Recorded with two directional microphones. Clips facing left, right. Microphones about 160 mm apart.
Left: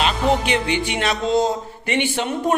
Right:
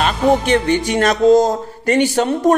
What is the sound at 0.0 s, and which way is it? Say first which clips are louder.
Speech: right 4 dB; 45° right (ahead or behind).